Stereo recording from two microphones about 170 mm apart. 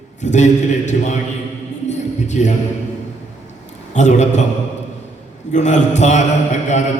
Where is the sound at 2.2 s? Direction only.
45° left (ahead or behind).